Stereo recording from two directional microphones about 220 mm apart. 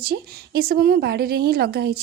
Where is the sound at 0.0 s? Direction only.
45° right (ahead or behind).